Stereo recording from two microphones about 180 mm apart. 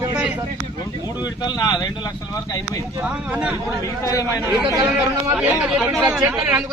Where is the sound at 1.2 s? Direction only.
25° left (ahead or behind).